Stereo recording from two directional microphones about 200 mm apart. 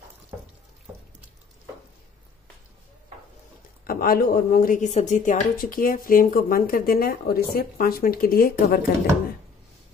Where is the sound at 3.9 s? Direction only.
50° left (ahead or behind).